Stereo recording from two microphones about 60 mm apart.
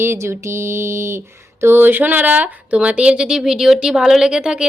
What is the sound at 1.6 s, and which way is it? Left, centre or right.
A woman's voice, right.